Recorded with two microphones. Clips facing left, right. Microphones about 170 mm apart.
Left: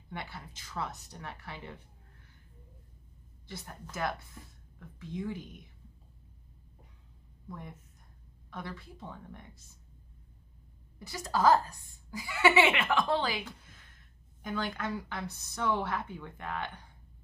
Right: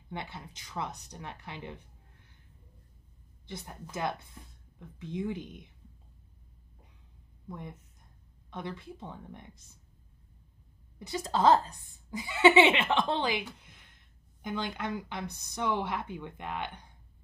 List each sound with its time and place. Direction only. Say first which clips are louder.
0.1 s speech: right 2 dB; 20° right (ahead or behind)
3.4 s speech: right 2 dB; 20° right (ahead or behind)
7.4 s a woman's voice: right 2 dB; 20° right (ahead or behind)
11.0 s speech: right 2 dB; 20° right (ahead or behind)